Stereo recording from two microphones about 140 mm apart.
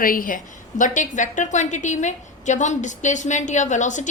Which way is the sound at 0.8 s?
65° left (ahead or behind).